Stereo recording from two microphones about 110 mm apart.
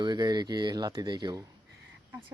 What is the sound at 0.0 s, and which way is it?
Speech, 40° right (ahead or behind).